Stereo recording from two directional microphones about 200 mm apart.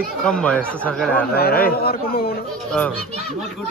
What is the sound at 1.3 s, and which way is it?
Speech, 50° left (ahead or behind).